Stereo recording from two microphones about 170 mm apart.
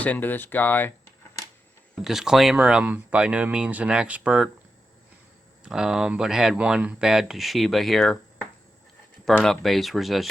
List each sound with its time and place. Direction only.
0.0 s speech: 10° left (ahead or behind)
2.0 s speech: centre (ahead or behind)
5.6 s speech: 5° right (ahead or behind)